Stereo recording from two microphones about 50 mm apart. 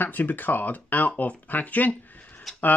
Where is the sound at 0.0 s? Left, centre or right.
Left.